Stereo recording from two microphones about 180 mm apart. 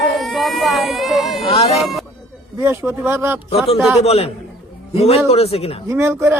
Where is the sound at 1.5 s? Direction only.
35° left (ahead or behind).